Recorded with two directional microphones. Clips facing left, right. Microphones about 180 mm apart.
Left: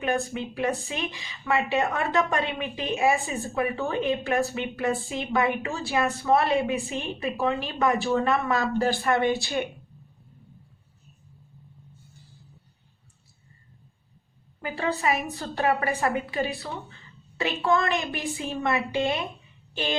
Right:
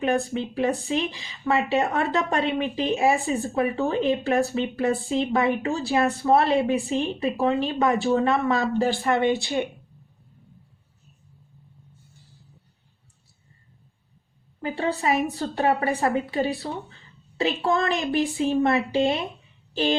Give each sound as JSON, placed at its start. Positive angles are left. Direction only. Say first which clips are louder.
{"t": 0.3, "sound": "a woman's voice", "louder": "right 3 dB", "side_deg": -35}
{"t": 14.6, "sound": "a sound", "louder": "right 3 dB", "side_deg": -30}
{"t": 15.0, "sound": "a woman's voice", "louder": "right 3 dB", "side_deg": -35}